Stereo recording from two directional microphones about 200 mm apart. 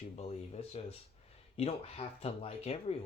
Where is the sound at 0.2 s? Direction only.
30° left (ahead or behind).